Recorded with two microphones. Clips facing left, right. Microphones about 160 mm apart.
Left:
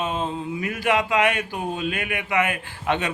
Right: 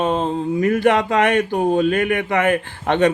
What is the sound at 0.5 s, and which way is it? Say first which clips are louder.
Speech: right 7 dB; 45° right (ahead or behind).